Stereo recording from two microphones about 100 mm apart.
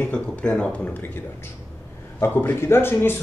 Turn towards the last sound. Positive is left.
turn(degrees=20)  # may be behind; listen again after turning